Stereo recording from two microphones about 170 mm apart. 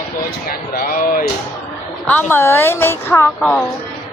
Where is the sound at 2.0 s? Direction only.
10° left (ahead or behind).